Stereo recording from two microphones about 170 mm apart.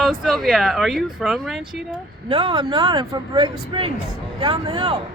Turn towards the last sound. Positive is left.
turn(degrees=-25)  # may be behind; listen again after turning